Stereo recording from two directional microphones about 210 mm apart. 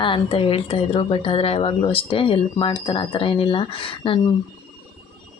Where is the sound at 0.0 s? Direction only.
25° left (ahead or behind).